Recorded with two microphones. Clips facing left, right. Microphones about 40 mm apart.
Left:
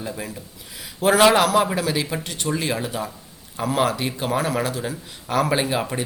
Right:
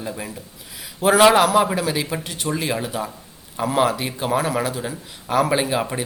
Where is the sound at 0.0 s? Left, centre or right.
Centre.